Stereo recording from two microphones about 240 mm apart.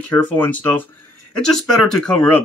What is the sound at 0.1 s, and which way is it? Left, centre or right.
Speech, centre.